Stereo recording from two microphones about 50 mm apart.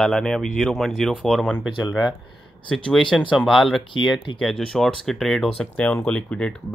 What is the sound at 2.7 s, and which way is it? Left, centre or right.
Speech, centre.